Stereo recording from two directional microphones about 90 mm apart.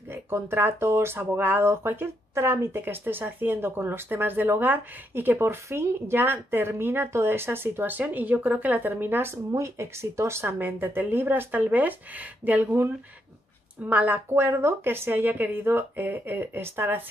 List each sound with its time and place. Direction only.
0.1 s speech: 25° right (ahead or behind)